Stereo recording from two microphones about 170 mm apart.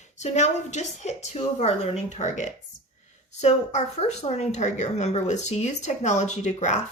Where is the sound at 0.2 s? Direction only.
45° left (ahead or behind).